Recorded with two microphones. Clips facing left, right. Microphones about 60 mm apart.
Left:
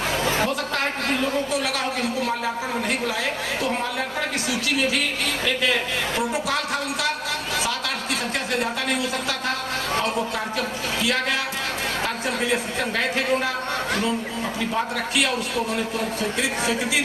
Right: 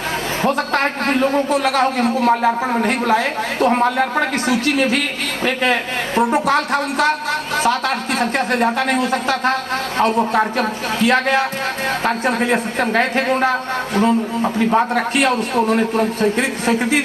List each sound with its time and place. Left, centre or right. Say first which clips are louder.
0.4 s a man's voice: right 7 dB; right
6.1 s a man's voice: right 11 dB; right
8.2 s a man's voice: right 10 dB; right